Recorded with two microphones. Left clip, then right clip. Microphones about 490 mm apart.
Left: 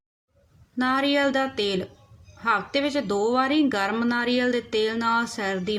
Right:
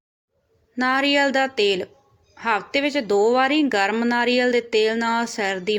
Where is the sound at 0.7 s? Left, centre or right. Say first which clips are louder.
Right 4 dB; left.